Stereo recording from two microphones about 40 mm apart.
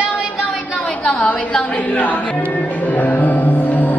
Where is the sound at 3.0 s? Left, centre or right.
Left.